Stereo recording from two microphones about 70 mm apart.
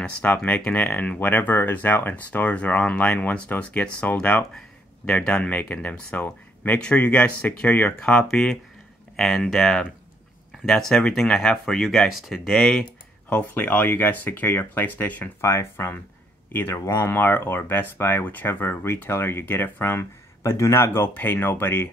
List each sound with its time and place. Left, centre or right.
0.5 s speech: left; by 12.6 s centre
13.3 s speech: left
15.4 s speech: left